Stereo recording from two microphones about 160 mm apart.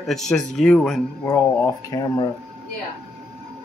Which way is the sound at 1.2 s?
20° left (ahead or behind).